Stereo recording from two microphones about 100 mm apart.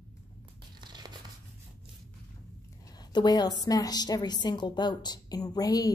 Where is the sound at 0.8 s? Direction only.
45° right (ahead or behind).